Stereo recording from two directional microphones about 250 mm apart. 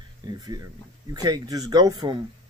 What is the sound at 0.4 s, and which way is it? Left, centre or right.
Speech, centre.